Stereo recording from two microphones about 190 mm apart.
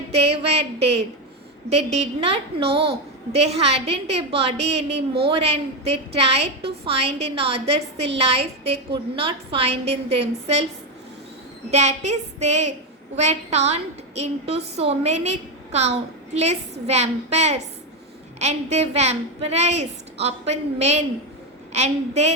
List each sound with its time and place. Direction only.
0.1 s a woman's voice: 35° right (ahead or behind)
6.4 s a woman's voice: 60° right (ahead or behind)
6.8 s a woman's voice: 30° right (ahead or behind)
11.7 s a woman's voice: 35° right (ahead or behind)